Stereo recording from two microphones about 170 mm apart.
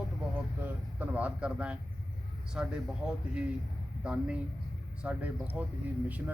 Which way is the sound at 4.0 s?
5° right (ahead or behind).